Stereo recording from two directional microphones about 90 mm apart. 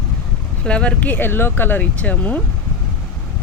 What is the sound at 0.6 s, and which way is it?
Speech, 10° left (ahead or behind).